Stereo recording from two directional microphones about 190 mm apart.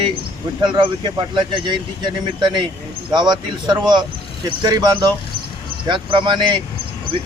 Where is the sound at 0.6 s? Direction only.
25° right (ahead or behind).